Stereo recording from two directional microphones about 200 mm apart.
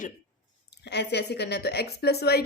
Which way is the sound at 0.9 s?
55° left (ahead or behind).